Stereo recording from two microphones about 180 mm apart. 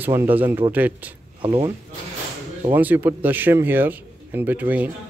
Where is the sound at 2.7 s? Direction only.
10° right (ahead or behind).